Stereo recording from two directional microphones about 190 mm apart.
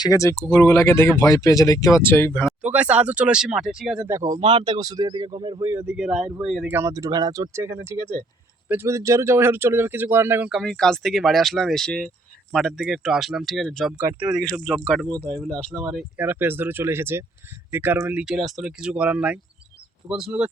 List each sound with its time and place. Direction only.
0.0 s speech: 15° left (ahead or behind)
2.5 s speech: 5° right (ahead or behind)
4.0 s speech: 15° right (ahead or behind)
5.7 s speech: 10° right (ahead or behind)